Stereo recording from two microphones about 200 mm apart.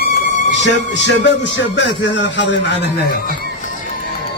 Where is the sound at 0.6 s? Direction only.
60° left (ahead or behind).